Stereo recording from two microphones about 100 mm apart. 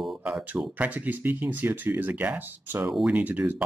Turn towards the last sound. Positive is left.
turn(degrees=-15)  # may be behind; listen again after turning